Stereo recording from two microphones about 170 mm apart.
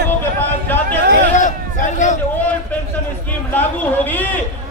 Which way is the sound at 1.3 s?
50° left (ahead or behind).